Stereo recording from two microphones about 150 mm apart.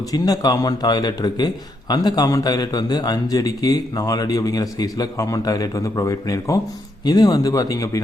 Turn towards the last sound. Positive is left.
turn(degrees=20)  # may be behind; listen again after turning